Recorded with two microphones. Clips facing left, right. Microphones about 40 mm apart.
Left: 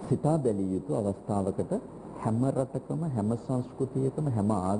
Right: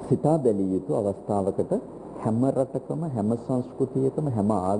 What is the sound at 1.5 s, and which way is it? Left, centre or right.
A man's voice, centre.